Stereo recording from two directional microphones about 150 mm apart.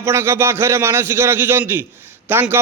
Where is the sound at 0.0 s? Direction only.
15° right (ahead or behind).